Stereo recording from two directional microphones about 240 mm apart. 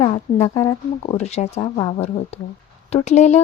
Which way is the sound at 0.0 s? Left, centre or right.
Left.